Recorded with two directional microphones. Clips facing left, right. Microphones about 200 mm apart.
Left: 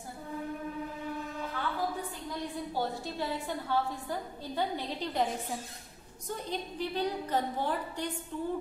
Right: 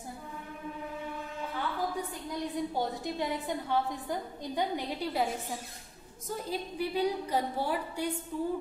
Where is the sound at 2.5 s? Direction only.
20° right (ahead or behind).